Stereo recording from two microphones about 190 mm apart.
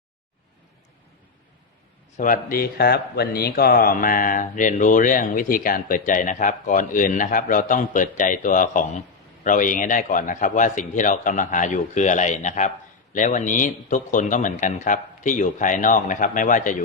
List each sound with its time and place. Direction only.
2.1 s a man's voice: 45° left (ahead or behind)